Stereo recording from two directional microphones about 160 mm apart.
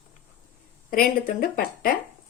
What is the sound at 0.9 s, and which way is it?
Speech, 60° left (ahead or behind).